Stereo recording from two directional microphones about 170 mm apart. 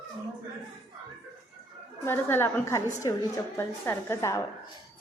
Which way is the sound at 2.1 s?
15° left (ahead or behind).